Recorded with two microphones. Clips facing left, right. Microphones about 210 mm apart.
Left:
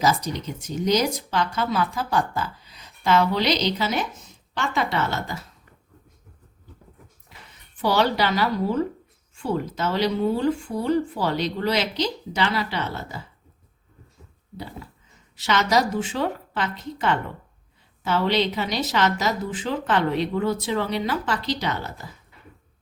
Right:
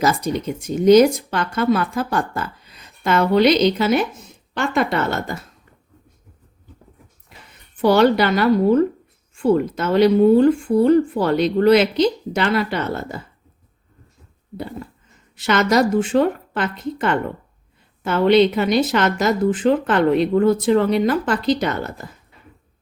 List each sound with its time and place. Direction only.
0.1 s speech: 50° right (ahead or behind)
7.8 s speech: 55° right (ahead or behind)
15.4 s speech: 55° right (ahead or behind)